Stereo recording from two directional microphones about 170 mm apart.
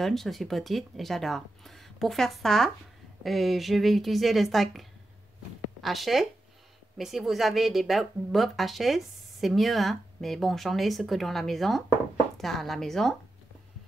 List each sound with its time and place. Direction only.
0.0 s speech: centre (ahead or behind)